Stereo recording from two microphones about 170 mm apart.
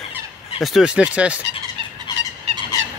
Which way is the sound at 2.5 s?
40° right (ahead or behind).